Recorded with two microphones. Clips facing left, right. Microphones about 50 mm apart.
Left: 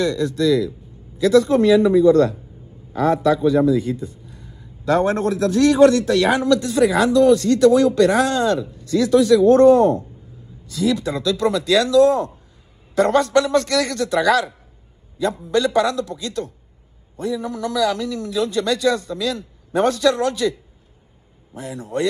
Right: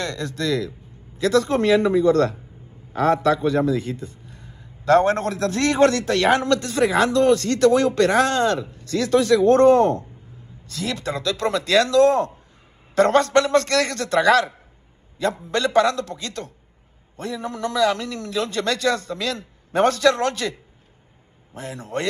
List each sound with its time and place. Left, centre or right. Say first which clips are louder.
0.0 s a man's voice: left 7 dB; right
21.5 s a man's voice: left 3 dB; right